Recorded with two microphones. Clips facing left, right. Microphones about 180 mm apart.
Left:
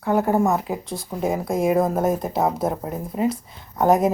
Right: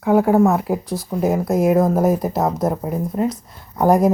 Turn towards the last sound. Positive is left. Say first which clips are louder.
# right 3 dB
turn(degrees=0)  # may be behind; listen again after turning